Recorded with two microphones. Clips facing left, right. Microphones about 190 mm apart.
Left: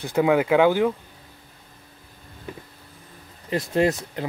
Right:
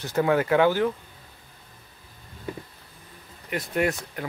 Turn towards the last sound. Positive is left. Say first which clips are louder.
# left 4 dB
turn(degrees=25)  # may be behind; listen again after turning